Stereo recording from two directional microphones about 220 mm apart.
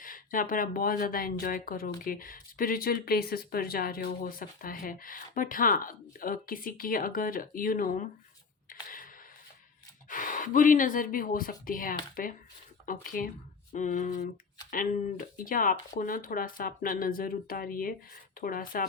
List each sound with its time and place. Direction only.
0.0 s speech: 40° left (ahead or behind)
10.1 s speech: 40° left (ahead or behind)